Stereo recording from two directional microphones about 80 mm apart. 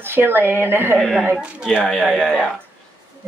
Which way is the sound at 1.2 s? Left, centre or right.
Centre.